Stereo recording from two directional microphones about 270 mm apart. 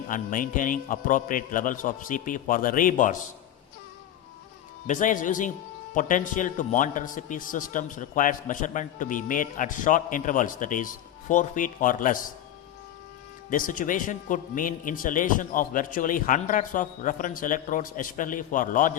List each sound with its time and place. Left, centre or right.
0.1 s a man's voice: left
4.9 s a man's voice: left
13.5 s a man's voice: left